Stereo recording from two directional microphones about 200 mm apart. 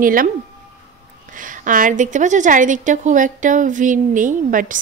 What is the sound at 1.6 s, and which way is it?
A woman's voice, 40° right (ahead or behind).